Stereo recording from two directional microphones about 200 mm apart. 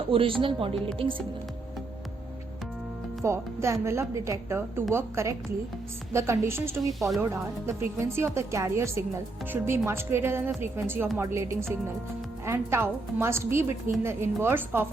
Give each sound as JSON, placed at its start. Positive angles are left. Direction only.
{"t": 0.1, "sound": "speech", "side_deg": -25}
{"t": 3.2, "sound": "speech", "side_deg": -15}